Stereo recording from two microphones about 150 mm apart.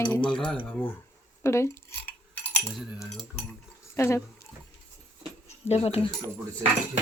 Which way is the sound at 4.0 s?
20° left (ahead or behind).